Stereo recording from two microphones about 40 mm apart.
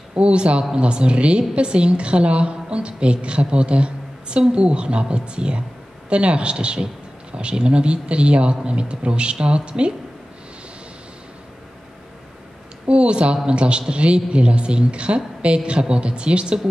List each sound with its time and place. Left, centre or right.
0.1 s a woman's voice: right
12.8 s a woman's voice: right